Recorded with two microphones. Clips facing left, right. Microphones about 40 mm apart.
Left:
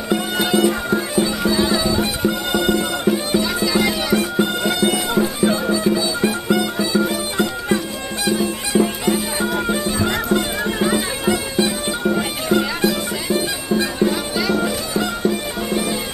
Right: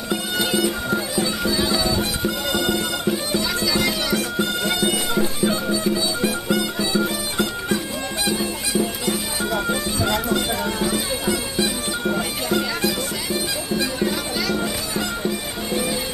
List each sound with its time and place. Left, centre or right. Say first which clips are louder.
0.6 s music: left 4 dB; centre
4.6 s bagpipes: left 3 dB; centre
7.0 s music: left 4 dB; centre
8.7 s bagpipes: left 6 dB; left
9.4 s bagpipes: left 3 dB; centre
9.9 s music: left 2 dB; left
10.3 s bagpipes: left 3 dB; left
12.2 s music: left 4 dB; centre
12.8 s bagpipes: left 4 dB; centre